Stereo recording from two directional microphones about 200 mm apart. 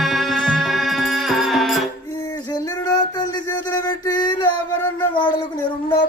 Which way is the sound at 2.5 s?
15° left (ahead or behind).